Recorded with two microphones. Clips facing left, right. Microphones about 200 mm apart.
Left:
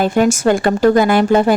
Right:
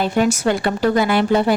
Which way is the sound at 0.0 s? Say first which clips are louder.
Left 4 dB; 50° left (ahead or behind).